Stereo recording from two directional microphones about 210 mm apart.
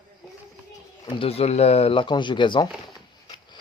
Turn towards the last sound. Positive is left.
turn(degrees=20)  # may be behind; listen again after turning